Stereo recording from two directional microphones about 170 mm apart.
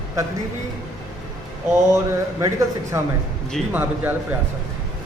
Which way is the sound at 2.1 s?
20° right (ahead or behind).